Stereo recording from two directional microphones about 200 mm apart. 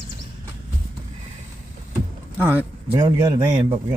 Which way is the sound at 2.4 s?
10° right (ahead or behind).